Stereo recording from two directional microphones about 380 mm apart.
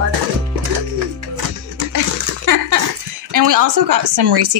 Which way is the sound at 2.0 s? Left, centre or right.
Right.